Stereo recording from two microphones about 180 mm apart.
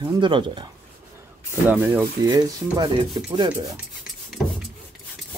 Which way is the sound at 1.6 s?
10° right (ahead or behind).